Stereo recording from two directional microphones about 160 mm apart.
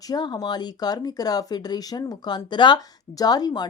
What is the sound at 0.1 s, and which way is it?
Speech, 25° left (ahead or behind).